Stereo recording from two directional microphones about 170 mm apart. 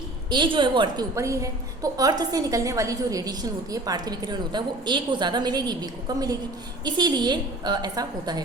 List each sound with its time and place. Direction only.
0.3 s a woman's voice: 30° right (ahead or behind)
1.1 s a woman's voice: 20° right (ahead or behind)